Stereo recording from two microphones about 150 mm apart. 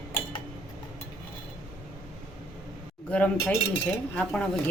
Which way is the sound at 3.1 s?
10° left (ahead or behind).